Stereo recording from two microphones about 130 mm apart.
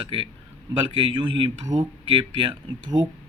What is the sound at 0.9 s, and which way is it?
Speech, 40° right (ahead or behind).